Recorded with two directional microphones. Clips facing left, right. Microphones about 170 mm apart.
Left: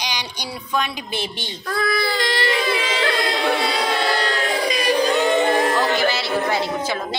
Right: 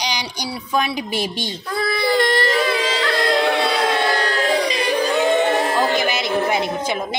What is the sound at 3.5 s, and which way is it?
Music, 60° right (ahead or behind).